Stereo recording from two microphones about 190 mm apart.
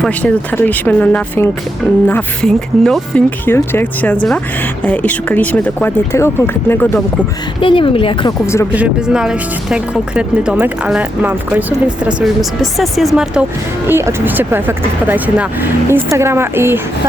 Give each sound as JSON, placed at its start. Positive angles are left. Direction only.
{"t": 0.0, "sound": "speech", "side_deg": 5}
{"t": 7.6, "sound": "a woman's voice", "side_deg": 25}
{"t": 8.7, "sound": "speech", "side_deg": -5}
{"t": 13.8, "sound": "speech", "side_deg": -10}